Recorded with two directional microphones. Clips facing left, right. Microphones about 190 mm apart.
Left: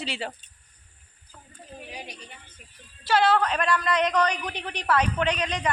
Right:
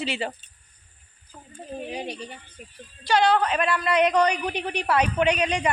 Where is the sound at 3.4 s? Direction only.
5° right (ahead or behind).